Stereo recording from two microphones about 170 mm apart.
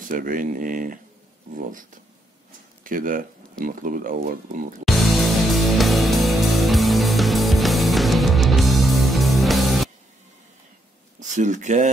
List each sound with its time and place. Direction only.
0.0 s speech: 55° right (ahead or behind)
4.8 s music: centre (ahead or behind)
11.1 s speech: 45° right (ahead or behind)